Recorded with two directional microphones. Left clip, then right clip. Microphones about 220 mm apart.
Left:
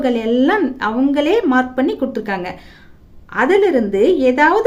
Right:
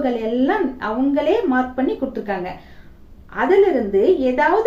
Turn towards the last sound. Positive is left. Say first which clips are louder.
# left 4 dB
turn(degrees=50)  # may be behind; listen again after turning